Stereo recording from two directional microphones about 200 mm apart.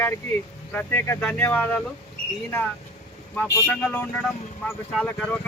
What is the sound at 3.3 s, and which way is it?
Speech, 5° left (ahead or behind).